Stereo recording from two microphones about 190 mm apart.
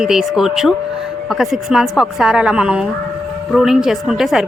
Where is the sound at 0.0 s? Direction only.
Centre (ahead or behind).